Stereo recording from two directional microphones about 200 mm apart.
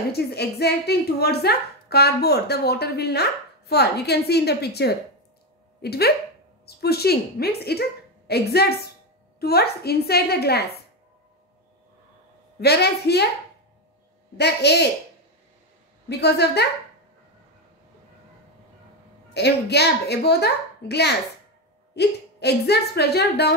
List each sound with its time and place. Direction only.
0.1 s a woman's voice: 55° left (ahead or behind)
12.5 s a woman's voice: 55° left (ahead or behind)
14.3 s a woman's voice: 55° left (ahead or behind)
16.1 s a woman's voice: 55° left (ahead or behind)
19.3 s a woman's voice: 55° left (ahead or behind)